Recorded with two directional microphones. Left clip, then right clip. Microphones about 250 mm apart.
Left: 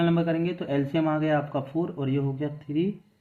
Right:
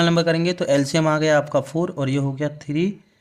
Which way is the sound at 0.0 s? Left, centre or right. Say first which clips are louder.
Right 7 dB; right.